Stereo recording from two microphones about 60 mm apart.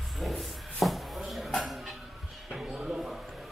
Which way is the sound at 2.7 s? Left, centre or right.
Centre.